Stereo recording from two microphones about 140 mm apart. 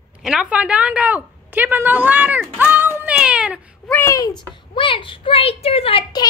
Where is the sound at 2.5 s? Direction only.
15° right (ahead or behind).